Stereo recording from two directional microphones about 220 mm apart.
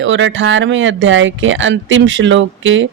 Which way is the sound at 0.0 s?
60° right (ahead or behind).